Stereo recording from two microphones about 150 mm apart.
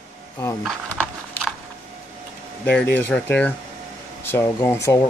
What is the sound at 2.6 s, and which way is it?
Speech, 10° left (ahead or behind).